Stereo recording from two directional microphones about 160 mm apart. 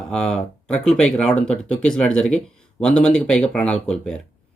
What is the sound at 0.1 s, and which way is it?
Speech, 5° left (ahead or behind).